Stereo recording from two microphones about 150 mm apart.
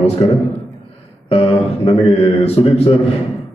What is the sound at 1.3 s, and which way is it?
A man's voice, 40° left (ahead or behind).